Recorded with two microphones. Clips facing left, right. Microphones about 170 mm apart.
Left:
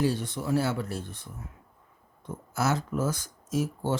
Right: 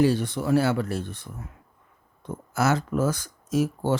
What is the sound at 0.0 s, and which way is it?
Speech, 75° right (ahead or behind).